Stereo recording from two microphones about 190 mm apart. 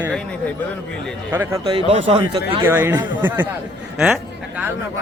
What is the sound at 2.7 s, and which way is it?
Speech, 10° right (ahead or behind).